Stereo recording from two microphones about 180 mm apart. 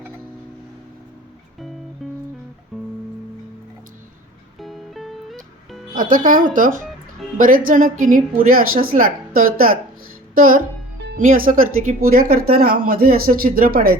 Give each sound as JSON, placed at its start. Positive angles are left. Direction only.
{"t": 2.7, "sound": "music", "side_deg": 0}
{"t": 4.6, "sound": "music", "side_deg": 0}
{"t": 5.9, "sound": "a woman's voice", "side_deg": -50}